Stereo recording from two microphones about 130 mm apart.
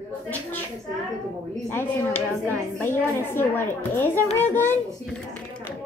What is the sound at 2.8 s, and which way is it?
A woman's voice, 15° left (ahead or behind).